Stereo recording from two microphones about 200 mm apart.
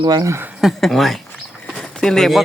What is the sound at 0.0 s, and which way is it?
Speech, 20° right (ahead or behind).